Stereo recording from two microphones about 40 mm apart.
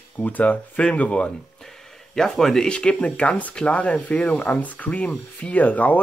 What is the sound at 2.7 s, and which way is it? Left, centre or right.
Speech, left.